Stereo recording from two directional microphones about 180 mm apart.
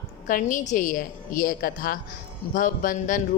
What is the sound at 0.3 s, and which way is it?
Speech, 50° left (ahead or behind).